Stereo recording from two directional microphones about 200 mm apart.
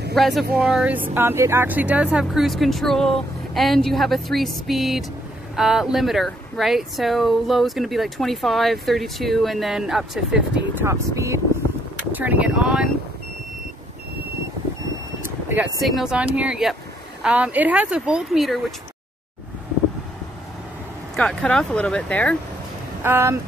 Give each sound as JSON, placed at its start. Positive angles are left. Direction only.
{"t": 0.1, "sound": "speech", "side_deg": 0}
{"t": 15.4, "sound": "speech", "side_deg": -5}
{"t": 21.2, "sound": "speech", "side_deg": 5}
{"t": 23.0, "sound": "speech", "side_deg": -10}